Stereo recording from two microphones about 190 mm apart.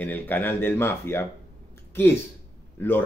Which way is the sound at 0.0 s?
10° left (ahead or behind).